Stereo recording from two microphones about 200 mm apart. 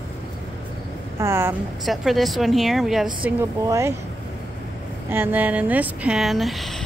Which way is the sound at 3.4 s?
15° right (ahead or behind).